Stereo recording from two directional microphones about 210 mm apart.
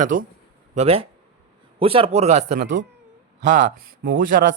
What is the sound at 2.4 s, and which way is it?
Speech, 55° right (ahead or behind).